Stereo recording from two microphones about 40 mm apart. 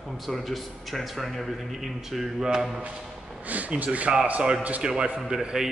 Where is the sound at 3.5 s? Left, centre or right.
Right.